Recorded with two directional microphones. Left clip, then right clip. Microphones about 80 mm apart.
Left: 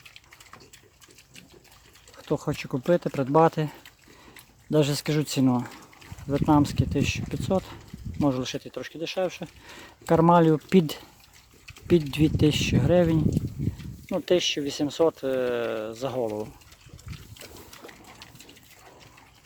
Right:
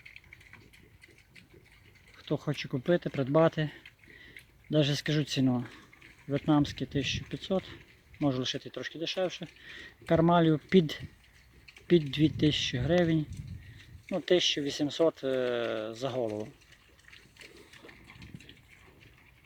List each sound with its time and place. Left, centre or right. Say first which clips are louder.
2.1 s speech: left 5 dB; left
6.3 s speech: left 6 dB; centre
6.6 s speech: left 6 dB; left